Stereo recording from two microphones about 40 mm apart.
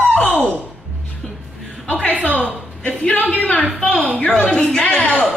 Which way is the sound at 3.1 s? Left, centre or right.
Left.